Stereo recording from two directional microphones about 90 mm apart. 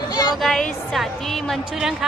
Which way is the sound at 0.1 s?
45° left (ahead or behind).